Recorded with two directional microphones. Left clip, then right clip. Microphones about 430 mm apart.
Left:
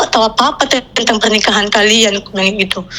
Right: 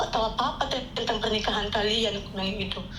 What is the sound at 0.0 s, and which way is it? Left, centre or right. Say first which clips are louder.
A woman's voice: left 15 dB; left.